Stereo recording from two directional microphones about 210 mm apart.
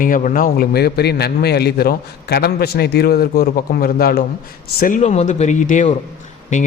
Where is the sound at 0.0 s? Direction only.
40° left (ahead or behind).